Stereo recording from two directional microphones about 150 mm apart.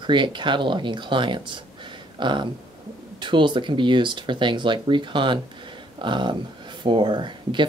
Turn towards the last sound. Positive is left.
turn(degrees=-30)  # may be behind; listen again after turning